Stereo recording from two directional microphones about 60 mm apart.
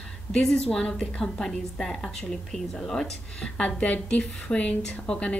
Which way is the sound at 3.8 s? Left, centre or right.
Left.